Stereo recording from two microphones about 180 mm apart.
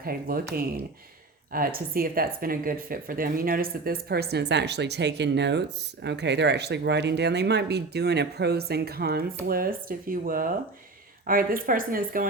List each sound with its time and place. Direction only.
0.0 s speech: 55° right (ahead or behind)
1.5 s speech: 55° right (ahead or behind)